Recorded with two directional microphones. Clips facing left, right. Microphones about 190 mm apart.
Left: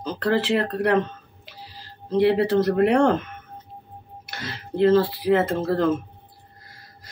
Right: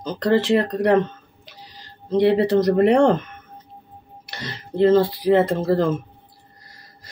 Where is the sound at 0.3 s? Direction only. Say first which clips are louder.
Right 4 dB; 5° left (ahead or behind).